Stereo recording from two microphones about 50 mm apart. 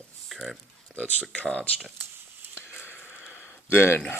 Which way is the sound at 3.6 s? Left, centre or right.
Left.